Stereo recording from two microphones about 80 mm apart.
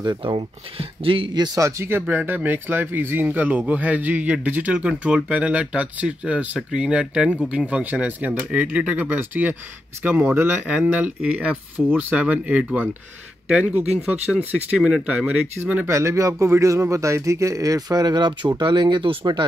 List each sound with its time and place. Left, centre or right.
0.0 s speech: right
1.0 s a man's voice: right
1.5 s speech: right
1.9 s speech: right
15.6 s speech: right
15.9 s speech: right